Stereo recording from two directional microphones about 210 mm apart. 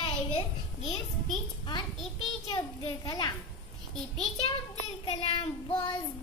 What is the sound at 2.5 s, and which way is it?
Child singing, 20° left (ahead or behind).